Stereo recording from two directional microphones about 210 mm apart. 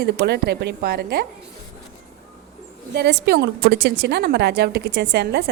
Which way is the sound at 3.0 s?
55° right (ahead or behind).